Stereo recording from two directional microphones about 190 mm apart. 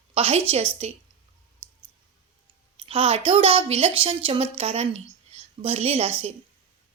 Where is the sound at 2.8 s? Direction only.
30° right (ahead or behind).